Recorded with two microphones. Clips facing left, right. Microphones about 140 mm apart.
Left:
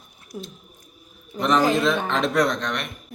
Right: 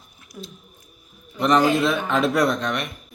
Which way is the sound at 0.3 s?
30° left (ahead or behind).